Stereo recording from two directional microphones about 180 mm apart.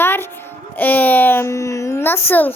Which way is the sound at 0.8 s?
10° left (ahead or behind).